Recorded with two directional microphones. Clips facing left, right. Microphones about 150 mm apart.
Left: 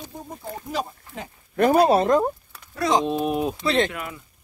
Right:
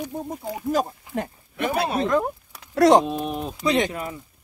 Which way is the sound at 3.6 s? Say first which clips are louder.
Even; 15° right (ahead or behind).